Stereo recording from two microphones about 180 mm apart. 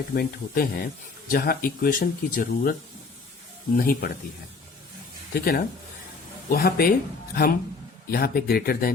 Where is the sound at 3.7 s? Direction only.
55° left (ahead or behind).